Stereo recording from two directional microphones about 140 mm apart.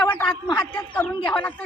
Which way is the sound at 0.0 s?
10° left (ahead or behind).